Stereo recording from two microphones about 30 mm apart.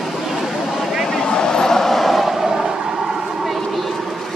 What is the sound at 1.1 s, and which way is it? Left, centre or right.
Vehicle, centre.